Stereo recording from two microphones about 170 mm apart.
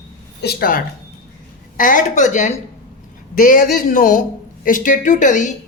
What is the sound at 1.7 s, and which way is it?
A woman's voice, 50° left (ahead or behind).